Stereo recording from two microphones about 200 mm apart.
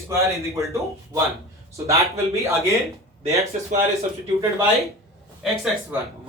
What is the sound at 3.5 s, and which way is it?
Speech, 35° right (ahead or behind).